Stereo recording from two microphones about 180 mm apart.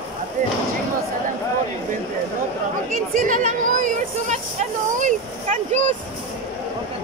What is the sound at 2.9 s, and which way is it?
Speech, 50° right (ahead or behind).